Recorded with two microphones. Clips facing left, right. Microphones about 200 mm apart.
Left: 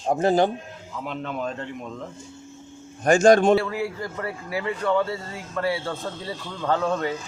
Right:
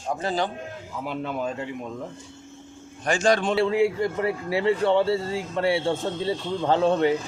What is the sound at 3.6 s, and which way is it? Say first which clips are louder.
A man's voice: right 7 dB; 25° right (ahead or behind).